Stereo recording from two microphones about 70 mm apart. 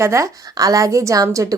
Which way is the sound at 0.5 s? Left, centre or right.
Right.